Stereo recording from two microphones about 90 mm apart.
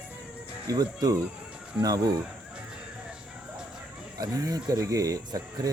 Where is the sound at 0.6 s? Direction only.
45° right (ahead or behind).